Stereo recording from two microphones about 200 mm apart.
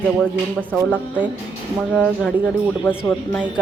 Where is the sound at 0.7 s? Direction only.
5° left (ahead or behind).